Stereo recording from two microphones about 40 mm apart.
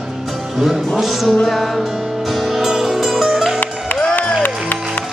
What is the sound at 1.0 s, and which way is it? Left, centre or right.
Music, centre.